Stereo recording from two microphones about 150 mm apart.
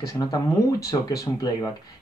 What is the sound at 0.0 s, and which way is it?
Speech, 25° left (ahead or behind).